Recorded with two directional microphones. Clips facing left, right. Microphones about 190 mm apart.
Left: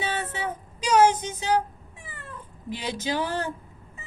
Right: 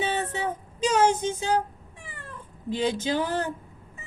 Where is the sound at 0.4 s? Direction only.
25° right (ahead or behind).